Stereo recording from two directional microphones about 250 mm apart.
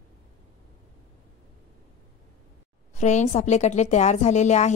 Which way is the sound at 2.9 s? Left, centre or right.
Left.